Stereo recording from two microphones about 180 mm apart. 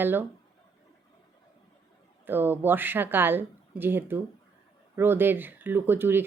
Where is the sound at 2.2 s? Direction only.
10° right (ahead or behind).